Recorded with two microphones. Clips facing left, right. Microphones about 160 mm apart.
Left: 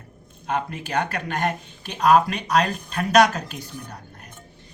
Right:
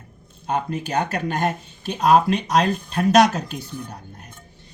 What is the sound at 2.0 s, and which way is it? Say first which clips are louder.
Speech: right 1 dB; 30° right (ahead or behind).